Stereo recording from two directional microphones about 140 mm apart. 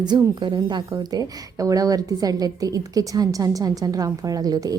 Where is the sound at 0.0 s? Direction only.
30° right (ahead or behind).